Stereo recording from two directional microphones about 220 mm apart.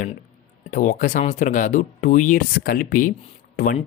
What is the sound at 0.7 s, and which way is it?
Speech, 35° left (ahead or behind).